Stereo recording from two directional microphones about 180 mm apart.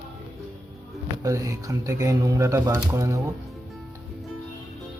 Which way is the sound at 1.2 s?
20° right (ahead or behind).